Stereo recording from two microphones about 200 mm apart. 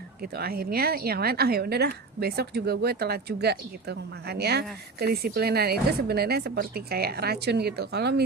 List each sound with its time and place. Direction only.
0.2 s a woman's voice: 50° right (ahead or behind)